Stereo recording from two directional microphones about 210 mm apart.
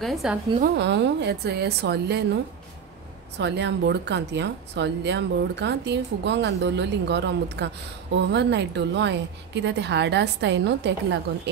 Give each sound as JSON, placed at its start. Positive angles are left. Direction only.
{"t": 0.0, "sound": "a woman's voice", "side_deg": 0}
{"t": 0.7, "sound": "a woman's voice", "side_deg": -55}
{"t": 3.3, "sound": "speech", "side_deg": -55}